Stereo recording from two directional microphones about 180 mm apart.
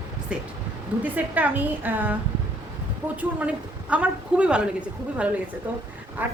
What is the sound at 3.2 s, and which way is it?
Speech, 10° right (ahead or behind).